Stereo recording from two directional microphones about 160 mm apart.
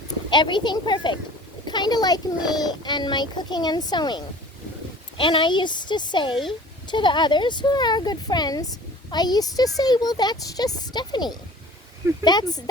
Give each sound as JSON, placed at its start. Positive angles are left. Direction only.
{"t": 0.1, "sound": "speech", "side_deg": 30}